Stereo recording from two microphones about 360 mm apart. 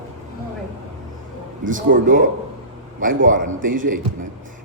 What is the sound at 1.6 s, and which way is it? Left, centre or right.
A man's voice, right.